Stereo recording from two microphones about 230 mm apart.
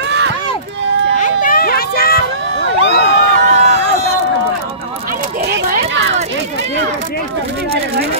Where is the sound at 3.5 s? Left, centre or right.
Right.